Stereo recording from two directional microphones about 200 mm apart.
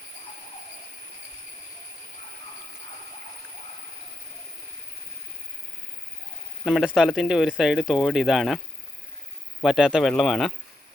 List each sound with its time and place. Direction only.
6.7 s speech: 5° right (ahead or behind)